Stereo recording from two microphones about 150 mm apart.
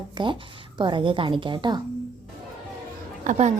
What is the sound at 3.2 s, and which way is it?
Speech, 55° right (ahead or behind).